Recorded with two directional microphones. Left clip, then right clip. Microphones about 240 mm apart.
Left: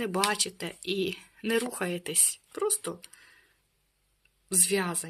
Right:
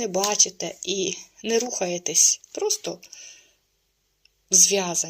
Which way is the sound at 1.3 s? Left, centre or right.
Left.